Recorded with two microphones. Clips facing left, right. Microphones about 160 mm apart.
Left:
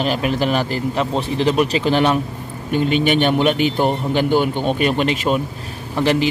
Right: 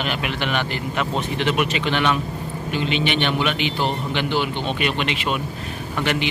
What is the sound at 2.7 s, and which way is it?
A man's voice, 45° left (ahead or behind).